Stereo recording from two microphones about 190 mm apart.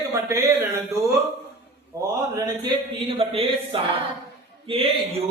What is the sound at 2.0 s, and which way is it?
Speech, 20° right (ahead or behind).